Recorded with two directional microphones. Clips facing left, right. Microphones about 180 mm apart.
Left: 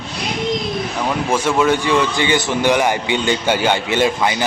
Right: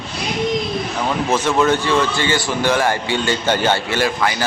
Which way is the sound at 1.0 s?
10° left (ahead or behind).